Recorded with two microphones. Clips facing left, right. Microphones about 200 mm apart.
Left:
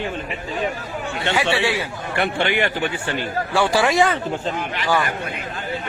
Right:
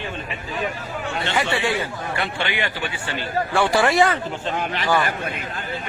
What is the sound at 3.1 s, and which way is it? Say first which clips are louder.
Speech: right 3 dB; 15° left (ahead or behind).